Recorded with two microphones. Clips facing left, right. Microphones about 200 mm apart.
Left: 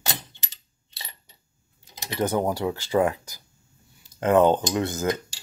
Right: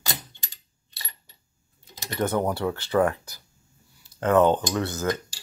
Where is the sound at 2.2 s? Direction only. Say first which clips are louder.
Left 1 dB; 10° left (ahead or behind).